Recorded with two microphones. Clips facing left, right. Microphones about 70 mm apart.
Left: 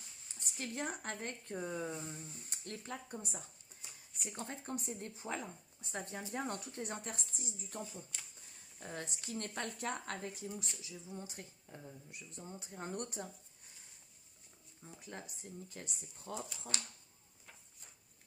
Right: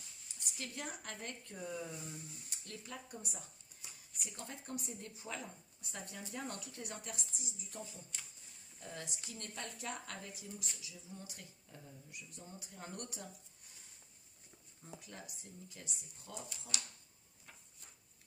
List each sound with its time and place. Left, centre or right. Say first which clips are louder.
0.3 s speech: left 4 dB; left
8.8 s speech: left 3 dB; left
15.1 s speech: left 4 dB; left